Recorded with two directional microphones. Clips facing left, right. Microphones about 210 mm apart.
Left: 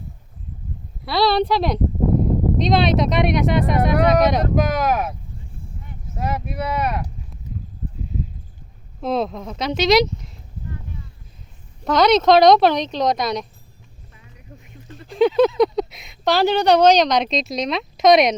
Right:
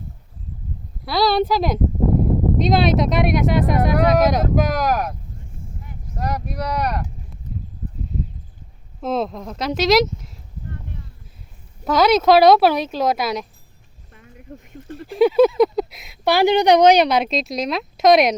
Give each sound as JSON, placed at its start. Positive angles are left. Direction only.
{"t": 1.0, "sound": "speech", "side_deg": 0}
{"t": 6.1, "sound": "speech", "side_deg": 5}
{"t": 9.0, "sound": "speech", "side_deg": 0}
{"t": 11.9, "sound": "speech", "side_deg": -5}
{"t": 14.1, "sound": "a sound", "side_deg": -50}
{"t": 15.0, "sound": "speech", "side_deg": -10}